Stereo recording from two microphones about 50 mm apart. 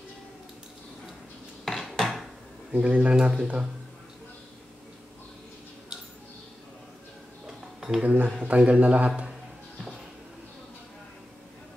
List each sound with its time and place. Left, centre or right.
1.6 s dishes: centre
2.7 s speech: right
7.4 s a sound: centre
8.0 s speech: right